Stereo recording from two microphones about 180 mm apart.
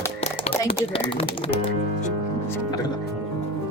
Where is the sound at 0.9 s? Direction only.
30° left (ahead or behind).